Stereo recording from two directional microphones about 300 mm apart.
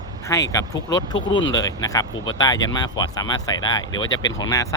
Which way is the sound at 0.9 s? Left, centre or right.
Left.